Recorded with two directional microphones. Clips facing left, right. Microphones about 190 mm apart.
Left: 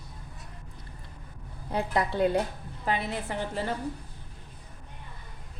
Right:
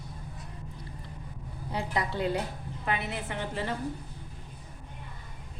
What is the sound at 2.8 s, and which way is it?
Speech, 35° left (ahead or behind).